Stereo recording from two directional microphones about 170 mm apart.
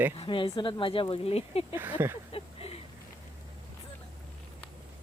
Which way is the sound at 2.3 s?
35° left (ahead or behind).